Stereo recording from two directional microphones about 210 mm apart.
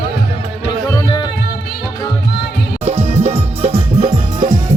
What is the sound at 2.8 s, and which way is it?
Music, 30° right (ahead or behind).